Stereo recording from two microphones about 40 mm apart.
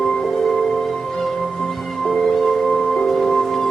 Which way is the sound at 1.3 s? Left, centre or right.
Centre.